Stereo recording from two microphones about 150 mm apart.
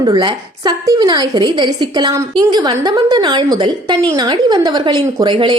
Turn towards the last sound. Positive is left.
turn(degrees=-35)  # may be behind; listen again after turning